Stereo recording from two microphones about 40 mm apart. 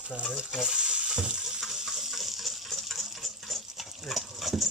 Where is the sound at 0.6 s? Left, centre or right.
Right.